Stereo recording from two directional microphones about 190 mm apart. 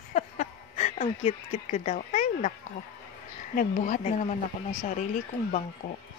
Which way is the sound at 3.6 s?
45° left (ahead or behind).